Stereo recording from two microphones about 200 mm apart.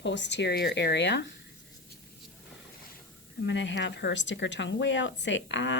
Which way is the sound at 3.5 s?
65° left (ahead or behind).